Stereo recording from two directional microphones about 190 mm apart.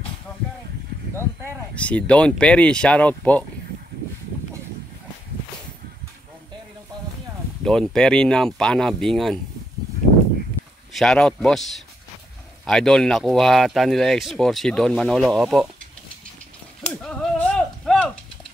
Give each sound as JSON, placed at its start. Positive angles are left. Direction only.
{"t": 1.8, "sound": "speech", "side_deg": 5}
{"t": 7.6, "sound": "speech", "side_deg": 5}
{"t": 10.0, "sound": "a sound", "side_deg": -60}
{"t": 10.9, "sound": "speech", "side_deg": 0}
{"t": 12.6, "sound": "speech", "side_deg": 5}
{"t": 17.0, "sound": "a sound", "side_deg": 5}